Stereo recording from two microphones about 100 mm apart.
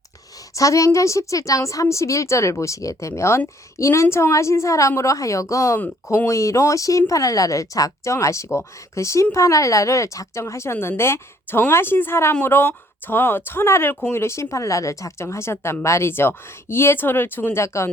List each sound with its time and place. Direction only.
0.5 s a woman's voice: 35° left (ahead or behind)